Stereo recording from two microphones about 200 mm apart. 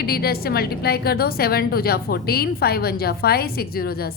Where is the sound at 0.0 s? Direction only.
50° left (ahead or behind).